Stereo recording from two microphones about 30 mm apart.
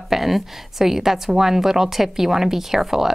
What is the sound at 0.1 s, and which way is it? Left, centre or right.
A woman's voice, centre.